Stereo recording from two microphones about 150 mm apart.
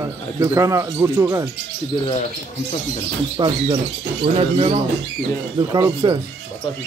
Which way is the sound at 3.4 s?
30° right (ahead or behind).